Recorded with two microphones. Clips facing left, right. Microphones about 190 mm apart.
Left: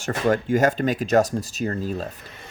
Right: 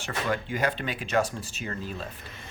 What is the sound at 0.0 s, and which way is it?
A man's voice, 45° left (ahead or behind).